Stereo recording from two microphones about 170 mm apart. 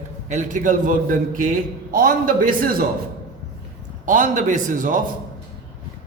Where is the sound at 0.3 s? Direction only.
45° right (ahead or behind).